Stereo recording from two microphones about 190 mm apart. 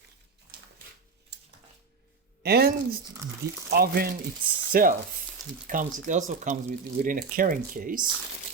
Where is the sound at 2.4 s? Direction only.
55° right (ahead or behind).